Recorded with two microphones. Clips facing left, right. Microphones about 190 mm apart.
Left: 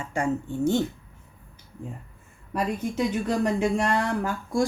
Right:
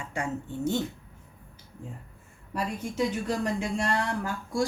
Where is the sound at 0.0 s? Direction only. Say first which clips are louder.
Left 5 dB; 50° left (ahead or behind).